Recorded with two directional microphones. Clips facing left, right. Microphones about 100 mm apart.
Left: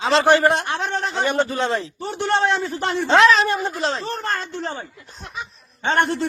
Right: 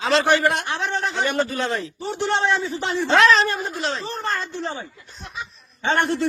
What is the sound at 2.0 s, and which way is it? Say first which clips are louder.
Speech: left 1 dB; 50° left (ahead or behind).